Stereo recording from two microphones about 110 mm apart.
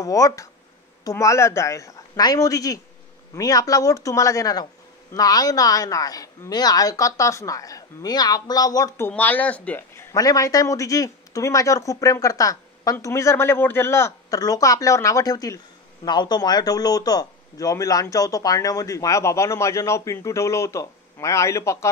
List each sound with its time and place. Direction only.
0.0 s speech: 30° left (ahead or behind)
9.0 s speech: 15° left (ahead or behind)
10.1 s speech: 35° left (ahead or behind)